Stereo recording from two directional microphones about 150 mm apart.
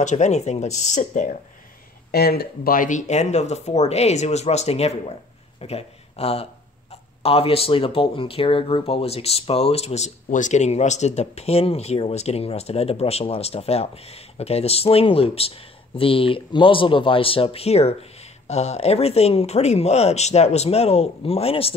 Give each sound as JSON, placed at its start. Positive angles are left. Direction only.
{"t": 0.0, "sound": "speech", "side_deg": 50}
{"t": 2.0, "sound": "speech", "side_deg": 90}